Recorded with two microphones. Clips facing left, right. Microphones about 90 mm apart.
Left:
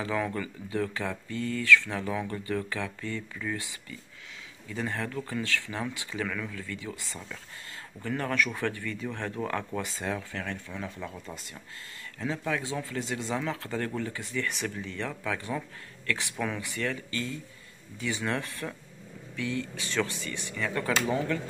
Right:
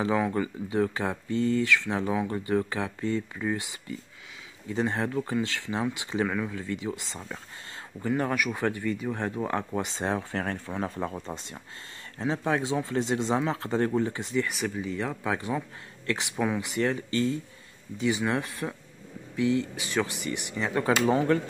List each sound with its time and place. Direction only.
0.0 s speech: 20° right (ahead or behind)
14.5 s speech: 10° right (ahead or behind); by 17.4 s 25° right (ahead or behind)
17.9 s speech: 15° right (ahead or behind)
21.0 s speech: 35° right (ahead or behind)